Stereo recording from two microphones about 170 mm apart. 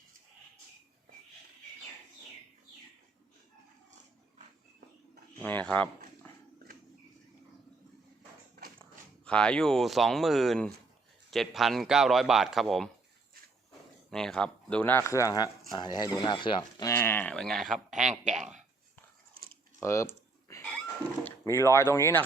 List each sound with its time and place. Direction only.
5.4 s speech: 10° left (ahead or behind)
9.2 s a man's voice: 5° left (ahead or behind)
14.1 s speech: 5° left (ahead or behind)
18.3 s speech: 45° right (ahead or behind)
19.8 s speech: 15° left (ahead or behind)
20.5 s cat: 15° left (ahead or behind)
21.2 s speech: 15° left (ahead or behind)